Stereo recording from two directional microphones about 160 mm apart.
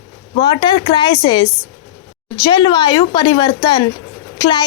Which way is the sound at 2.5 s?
25° left (ahead or behind).